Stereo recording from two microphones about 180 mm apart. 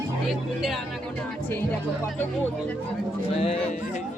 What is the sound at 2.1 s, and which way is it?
Speech, 10° left (ahead or behind).